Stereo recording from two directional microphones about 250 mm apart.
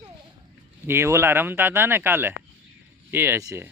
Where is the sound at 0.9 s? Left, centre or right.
Centre.